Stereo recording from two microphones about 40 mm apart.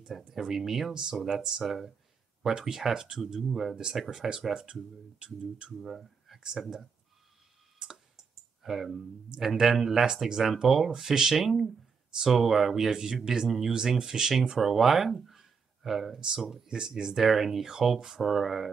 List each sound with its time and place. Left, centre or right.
0.0 s speech: centre
5.8 s a sound: centre
8.6 s speech: centre
14.6 s speech: centre
16.6 s speech: centre
16.9 s speech: centre